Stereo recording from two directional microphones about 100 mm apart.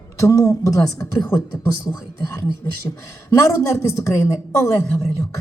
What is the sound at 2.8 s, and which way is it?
Speech, 30° left (ahead or behind).